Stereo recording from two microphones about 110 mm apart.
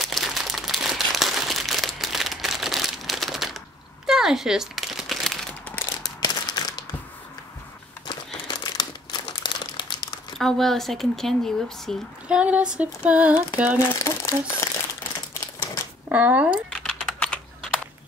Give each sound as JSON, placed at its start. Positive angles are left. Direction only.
{"t": 0.0, "sound": "crumpling", "side_deg": 0}
{"t": 5.5, "sound": "crumpling", "side_deg": 10}
{"t": 6.0, "sound": "a sound", "side_deg": 40}
{"t": 8.5, "sound": "crumpling", "side_deg": 40}
{"t": 10.4, "sound": "speech", "side_deg": 5}
{"t": 12.3, "sound": "a sound", "side_deg": -10}
{"t": 13.9, "sound": "speech", "side_deg": 30}
{"t": 15.4, "sound": "typewriter", "side_deg": 20}
{"t": 16.1, "sound": "a sound", "side_deg": -15}
{"t": 16.7, "sound": "typing", "side_deg": 10}